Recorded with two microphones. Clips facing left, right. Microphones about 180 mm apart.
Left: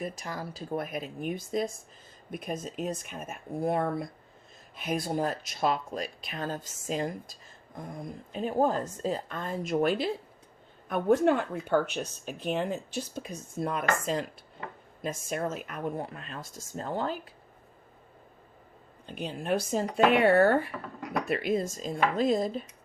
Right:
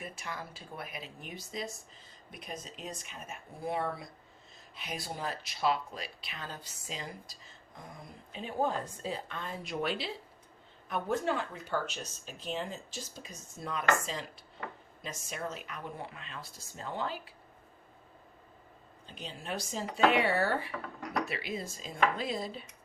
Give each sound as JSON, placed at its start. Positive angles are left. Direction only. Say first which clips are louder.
{"t": 0.0, "sound": "speech", "louder": "left 6 dB", "side_deg": 40}
{"t": 19.0, "sound": "speech", "louder": "left 9 dB", "side_deg": 55}